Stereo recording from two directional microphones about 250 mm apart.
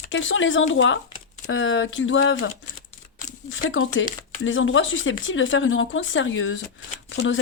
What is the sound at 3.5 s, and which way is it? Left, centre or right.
Speech, left.